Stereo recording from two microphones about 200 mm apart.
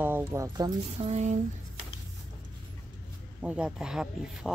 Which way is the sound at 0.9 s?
35° right (ahead or behind).